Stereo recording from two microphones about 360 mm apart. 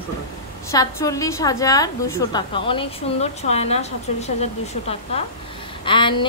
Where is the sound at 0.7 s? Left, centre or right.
Centre.